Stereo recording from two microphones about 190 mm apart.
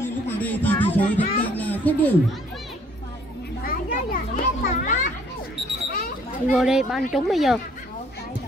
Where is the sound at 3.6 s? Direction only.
50° left (ahead or behind).